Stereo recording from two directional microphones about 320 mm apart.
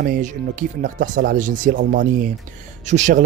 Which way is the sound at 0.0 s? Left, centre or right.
Right.